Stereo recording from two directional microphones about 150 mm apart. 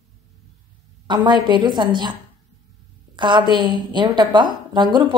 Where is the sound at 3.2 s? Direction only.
30° right (ahead or behind).